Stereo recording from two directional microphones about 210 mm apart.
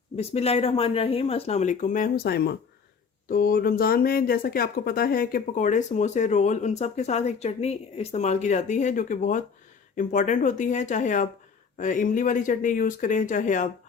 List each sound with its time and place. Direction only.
0.2 s speech: 30° left (ahead or behind)